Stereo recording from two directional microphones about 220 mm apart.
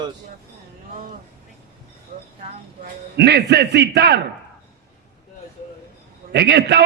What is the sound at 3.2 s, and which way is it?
Speech, 50° right (ahead or behind).